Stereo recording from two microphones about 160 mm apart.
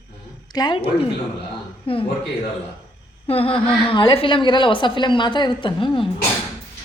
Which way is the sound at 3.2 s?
35° left (ahead or behind).